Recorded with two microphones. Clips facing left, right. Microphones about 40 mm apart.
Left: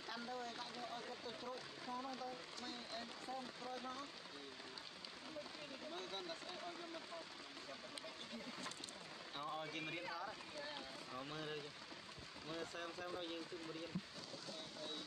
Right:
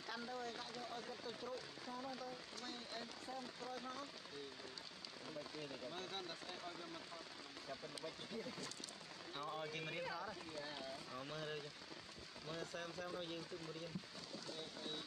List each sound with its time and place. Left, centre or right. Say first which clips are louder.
0.1 s speech: right 1 dB; centre
5.6 s speech: right 1 dB; centre
8.0 s speech: right 3 dB; centre